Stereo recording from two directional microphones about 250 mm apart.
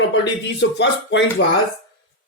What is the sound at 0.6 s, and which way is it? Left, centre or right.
Speech, left.